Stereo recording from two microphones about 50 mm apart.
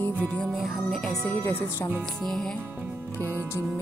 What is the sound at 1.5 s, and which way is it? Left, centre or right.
Music, left.